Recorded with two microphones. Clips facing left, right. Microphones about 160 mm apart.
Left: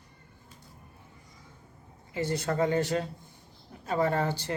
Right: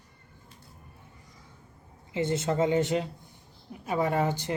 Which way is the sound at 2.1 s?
20° right (ahead or behind).